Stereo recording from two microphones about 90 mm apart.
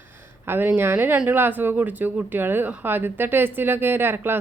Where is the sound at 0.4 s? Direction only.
25° right (ahead or behind).